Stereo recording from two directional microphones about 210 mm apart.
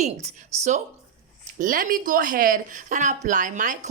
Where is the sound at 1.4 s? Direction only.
40° right (ahead or behind).